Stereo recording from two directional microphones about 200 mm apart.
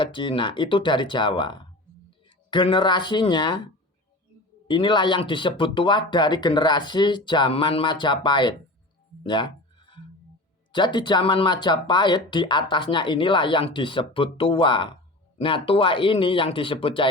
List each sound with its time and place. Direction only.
0.0 s speech: 25° left (ahead or behind)
4.7 s speech: 25° left (ahead or behind)
9.2 s a sound: 25° left (ahead or behind)
10.7 s speech: 25° left (ahead or behind)